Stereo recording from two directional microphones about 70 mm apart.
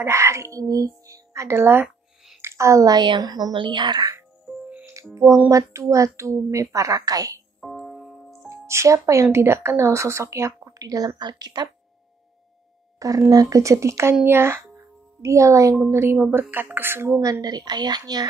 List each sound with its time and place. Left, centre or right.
0.0 s speech: right
2.4 s a sound: right
2.9 s a woman's voice: right
4.5 s music: centre
5.5 s a woman's voice: right
7.6 s music: centre
8.6 s a woman's voice: right
10.8 s a woman's voice: right
13.3 s a woman's voice: right
15.2 s speech: right
15.9 s a woman's voice: right
17.2 s a woman's voice: right